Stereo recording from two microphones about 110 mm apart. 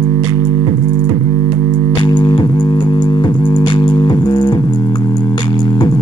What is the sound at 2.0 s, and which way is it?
Music, 45° left (ahead or behind).